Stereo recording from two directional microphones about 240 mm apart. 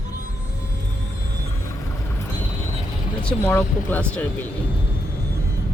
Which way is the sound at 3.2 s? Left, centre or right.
Centre.